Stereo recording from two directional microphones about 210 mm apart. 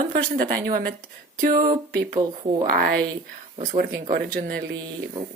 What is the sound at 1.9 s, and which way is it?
Speech, 50° right (ahead or behind).